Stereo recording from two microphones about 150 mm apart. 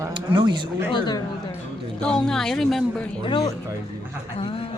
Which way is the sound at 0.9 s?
30° left (ahead or behind).